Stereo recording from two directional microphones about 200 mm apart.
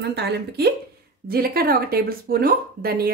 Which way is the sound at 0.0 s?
55° right (ahead or behind).